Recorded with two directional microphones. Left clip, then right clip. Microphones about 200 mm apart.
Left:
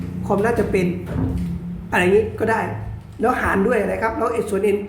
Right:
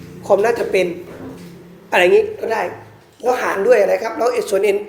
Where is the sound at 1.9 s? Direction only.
15° right (ahead or behind).